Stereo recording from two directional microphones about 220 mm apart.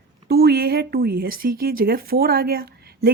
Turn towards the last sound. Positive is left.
turn(degrees=-45)  # may be behind; listen again after turning